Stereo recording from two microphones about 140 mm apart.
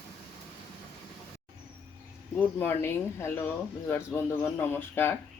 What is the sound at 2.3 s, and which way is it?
Speech, 15° left (ahead or behind).